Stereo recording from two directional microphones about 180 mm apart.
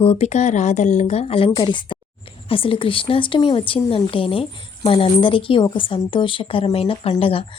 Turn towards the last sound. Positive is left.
turn(degrees=30)  # may be behind; listen again after turning